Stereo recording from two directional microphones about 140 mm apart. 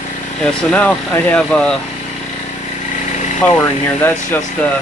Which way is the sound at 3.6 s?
15° left (ahead or behind).